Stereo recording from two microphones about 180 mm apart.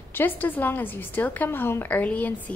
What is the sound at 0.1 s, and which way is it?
A woman's voice, 10° left (ahead or behind).